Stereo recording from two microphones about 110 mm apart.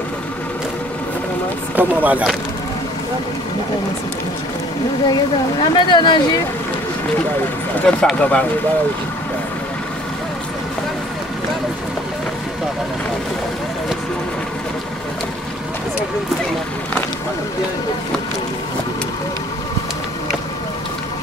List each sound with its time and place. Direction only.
1.8 s speech: 15° right (ahead or behind)
5.6 s speech: 45° left (ahead or behind)
7.8 s speech: 10° left (ahead or behind)